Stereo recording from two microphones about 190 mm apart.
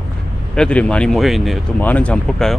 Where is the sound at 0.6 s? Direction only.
5° left (ahead or behind).